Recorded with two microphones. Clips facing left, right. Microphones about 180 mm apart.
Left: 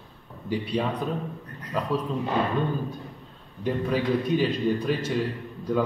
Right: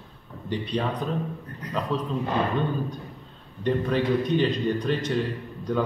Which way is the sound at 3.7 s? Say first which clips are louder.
Right 1 dB; 5° left (ahead or behind).